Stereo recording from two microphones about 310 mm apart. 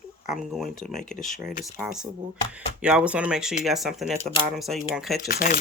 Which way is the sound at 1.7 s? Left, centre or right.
Centre.